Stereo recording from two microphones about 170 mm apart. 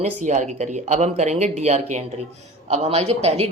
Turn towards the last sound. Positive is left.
turn(degrees=-40)  # may be behind; listen again after turning